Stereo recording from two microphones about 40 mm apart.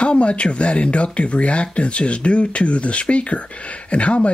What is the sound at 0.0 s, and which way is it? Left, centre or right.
Speech, left.